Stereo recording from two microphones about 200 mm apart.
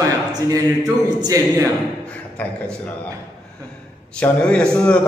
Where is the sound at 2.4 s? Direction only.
10° left (ahead or behind).